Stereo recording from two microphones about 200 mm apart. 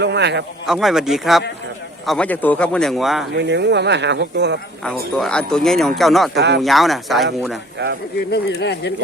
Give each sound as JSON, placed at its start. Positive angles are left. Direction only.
{"t": 0.0, "sound": "speech", "side_deg": -60}
{"t": 0.7, "sound": "speech", "side_deg": 0}
{"t": 3.3, "sound": "speech", "side_deg": -60}
{"t": 5.1, "sound": "speech", "side_deg": 5}
{"t": 6.3, "sound": "speech", "side_deg": -60}
{"t": 6.6, "sound": "speech", "side_deg": 0}
{"t": 7.8, "sound": "speech", "side_deg": -60}
{"t": 8.3, "sound": "speech", "side_deg": 60}